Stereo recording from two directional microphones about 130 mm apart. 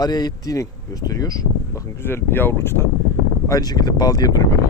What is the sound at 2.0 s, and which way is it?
Speech, 15° left (ahead or behind).